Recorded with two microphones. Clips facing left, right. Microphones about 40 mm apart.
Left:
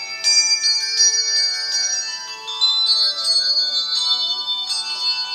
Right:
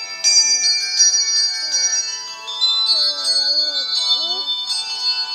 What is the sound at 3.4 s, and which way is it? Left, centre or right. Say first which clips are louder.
Bell: right 1 dB; centre.